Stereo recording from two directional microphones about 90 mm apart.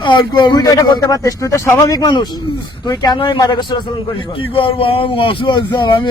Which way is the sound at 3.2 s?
60° left (ahead or behind).